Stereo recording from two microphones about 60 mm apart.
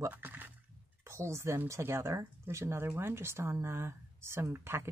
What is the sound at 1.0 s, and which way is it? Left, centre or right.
Speech, right.